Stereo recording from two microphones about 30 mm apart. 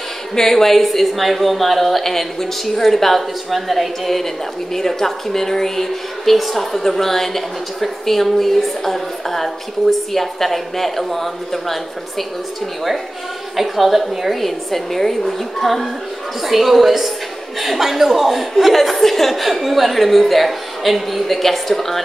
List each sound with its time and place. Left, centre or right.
0.4 s speech: centre
4.7 s a woman's voice: centre
13.6 s speech: centre